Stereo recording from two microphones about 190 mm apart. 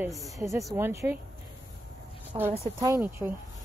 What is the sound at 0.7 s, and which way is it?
Speech, 15° right (ahead or behind).